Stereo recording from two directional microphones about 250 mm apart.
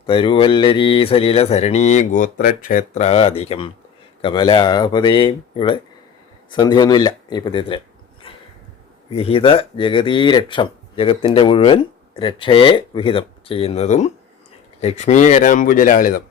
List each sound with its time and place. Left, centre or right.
0.0 s speech: left
8.2 s a sound: left
9.1 s speech: left